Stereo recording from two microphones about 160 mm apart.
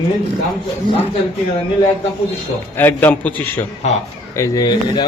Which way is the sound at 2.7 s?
10° left (ahead or behind).